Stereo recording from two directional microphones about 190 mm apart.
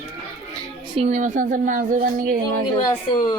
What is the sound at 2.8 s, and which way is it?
Speech, 20° left (ahead or behind).